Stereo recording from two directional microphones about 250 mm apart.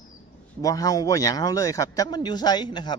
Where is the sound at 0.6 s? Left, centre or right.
Centre.